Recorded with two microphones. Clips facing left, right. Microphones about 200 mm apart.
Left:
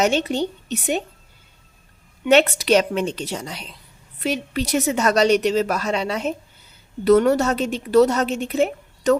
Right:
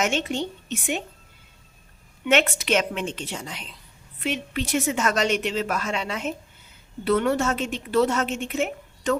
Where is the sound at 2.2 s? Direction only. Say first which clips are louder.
Left 6 dB; 35° left (ahead or behind).